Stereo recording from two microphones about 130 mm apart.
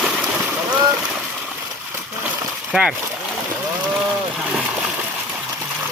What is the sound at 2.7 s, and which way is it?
Speech, 5° right (ahead or behind).